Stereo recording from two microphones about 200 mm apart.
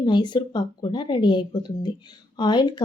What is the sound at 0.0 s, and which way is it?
A woman's voice, 20° left (ahead or behind).